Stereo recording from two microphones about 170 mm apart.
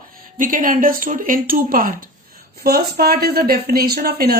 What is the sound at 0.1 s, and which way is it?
Speech, 55° right (ahead or behind).